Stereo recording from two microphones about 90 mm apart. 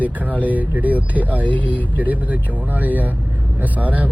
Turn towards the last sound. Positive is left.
turn(degrees=-15)  # may be behind; listen again after turning